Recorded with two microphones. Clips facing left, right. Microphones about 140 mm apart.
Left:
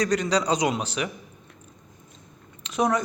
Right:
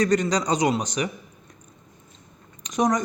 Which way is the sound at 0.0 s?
10° left (ahead or behind).